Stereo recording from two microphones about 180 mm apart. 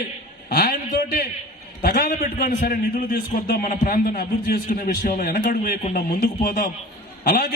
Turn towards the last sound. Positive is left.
turn(degrees=55)  # may be behind; listen again after turning